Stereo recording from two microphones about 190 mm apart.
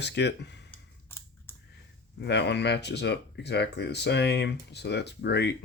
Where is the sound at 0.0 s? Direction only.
65° left (ahead or behind).